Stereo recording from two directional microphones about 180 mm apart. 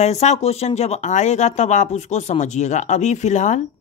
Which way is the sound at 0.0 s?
40° left (ahead or behind).